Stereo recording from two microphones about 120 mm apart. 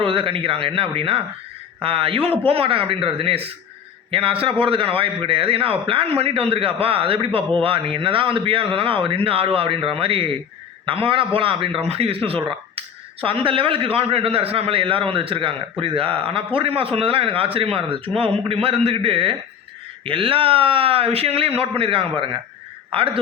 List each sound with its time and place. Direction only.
0.0 s speech: 45° right (ahead or behind)